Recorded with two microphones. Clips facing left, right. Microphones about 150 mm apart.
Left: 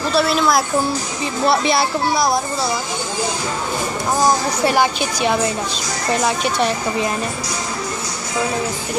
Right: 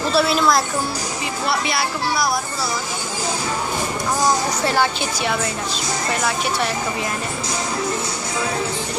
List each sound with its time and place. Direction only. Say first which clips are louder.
0.1 s a woman's voice: left 1 dB; centre (ahead or behind)
1.5 s speech: left 6 dB; 25° left (ahead or behind)
4.6 s a woman's voice: left 6 dB; 15° left (ahead or behind)